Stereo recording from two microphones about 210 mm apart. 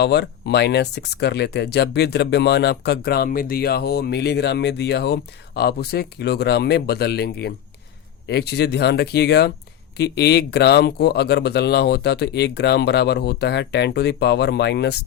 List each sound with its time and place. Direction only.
0.0 s speech: 50° left (ahead or behind)